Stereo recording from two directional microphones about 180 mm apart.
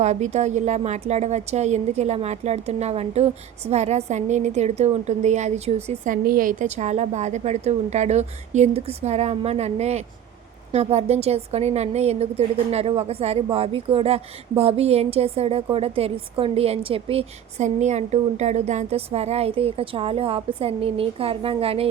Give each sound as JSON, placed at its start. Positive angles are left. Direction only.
{"t": 0.0, "sound": "a woman's voice", "side_deg": -40}
{"t": 6.2, "sound": "a woman's voice", "side_deg": -50}